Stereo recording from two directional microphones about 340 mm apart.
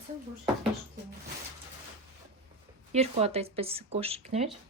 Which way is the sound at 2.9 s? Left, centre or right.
Centre.